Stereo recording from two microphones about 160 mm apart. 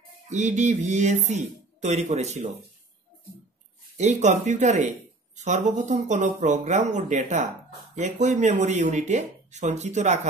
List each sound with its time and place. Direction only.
0.3 s speech: 50° right (ahead or behind)
3.9 s speech: 45° right (ahead or behind)